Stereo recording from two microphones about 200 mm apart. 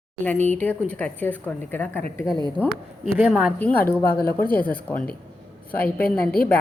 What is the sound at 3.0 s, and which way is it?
Speech, 5° right (ahead or behind).